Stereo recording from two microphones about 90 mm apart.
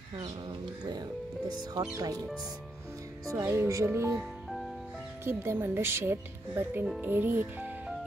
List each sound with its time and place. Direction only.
1.6 s speech: 50° right (ahead or behind)
3.3 s speech: 35° right (ahead or behind)
4.2 s music: centre (ahead or behind)
5.2 s speech: 25° right (ahead or behind)